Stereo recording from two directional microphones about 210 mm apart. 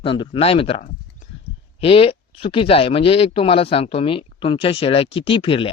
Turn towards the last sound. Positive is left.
turn(degrees=25)  # may be behind; listen again after turning